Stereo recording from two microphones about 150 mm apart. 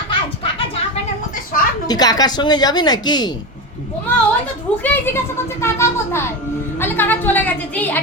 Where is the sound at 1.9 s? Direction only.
25° left (ahead or behind).